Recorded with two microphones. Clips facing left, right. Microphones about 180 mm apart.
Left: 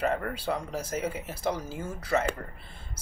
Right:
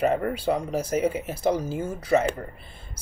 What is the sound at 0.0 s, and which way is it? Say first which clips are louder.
Speech: right 6 dB; 15° right (ahead or behind).